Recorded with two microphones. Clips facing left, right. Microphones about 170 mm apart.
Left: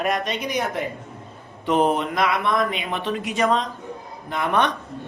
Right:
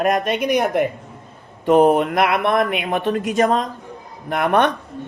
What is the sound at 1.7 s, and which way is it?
A man's voice, 50° right (ahead or behind).